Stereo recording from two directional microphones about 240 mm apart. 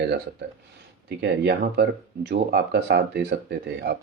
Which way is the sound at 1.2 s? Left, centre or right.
Right.